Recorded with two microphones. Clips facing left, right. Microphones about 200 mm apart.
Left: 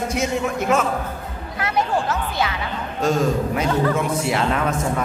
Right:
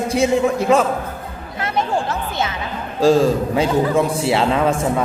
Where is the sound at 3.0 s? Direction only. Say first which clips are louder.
Right 6 dB; 30° right (ahead or behind).